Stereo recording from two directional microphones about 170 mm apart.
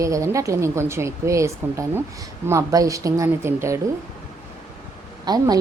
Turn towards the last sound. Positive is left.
turn(degrees=-25)  # may be behind; listen again after turning